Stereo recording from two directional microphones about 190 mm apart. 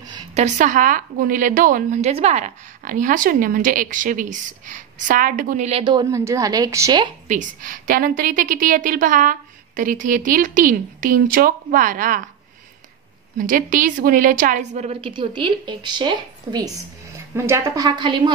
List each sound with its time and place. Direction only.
0.1 s a woman's voice: 35° right (ahead or behind); by 7.1 s 20° right (ahead or behind)
7.2 s a woman's voice: 40° right (ahead or behind)
13.4 s a woman's voice: 45° right (ahead or behind); by 18.3 s 25° right (ahead or behind)